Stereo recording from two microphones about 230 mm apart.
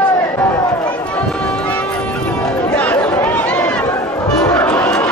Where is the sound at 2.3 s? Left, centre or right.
Centre.